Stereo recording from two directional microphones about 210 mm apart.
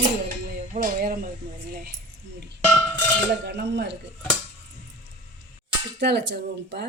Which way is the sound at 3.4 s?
55° right (ahead or behind).